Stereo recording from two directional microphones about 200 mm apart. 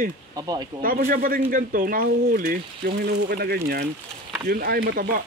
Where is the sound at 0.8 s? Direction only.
45° right (ahead or behind).